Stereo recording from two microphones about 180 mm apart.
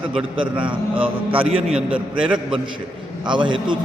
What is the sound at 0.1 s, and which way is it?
A man's voice, 30° right (ahead or behind).